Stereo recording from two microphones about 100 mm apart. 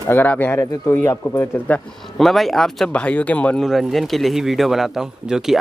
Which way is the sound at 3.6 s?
Centre (ahead or behind).